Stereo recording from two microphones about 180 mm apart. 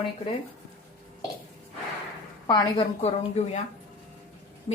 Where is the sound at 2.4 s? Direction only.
25° left (ahead or behind).